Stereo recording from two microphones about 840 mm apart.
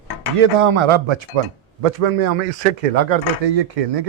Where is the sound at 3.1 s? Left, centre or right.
Right.